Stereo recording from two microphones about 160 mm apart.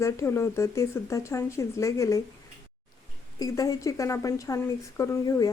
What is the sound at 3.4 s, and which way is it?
A woman's voice, 20° left (ahead or behind).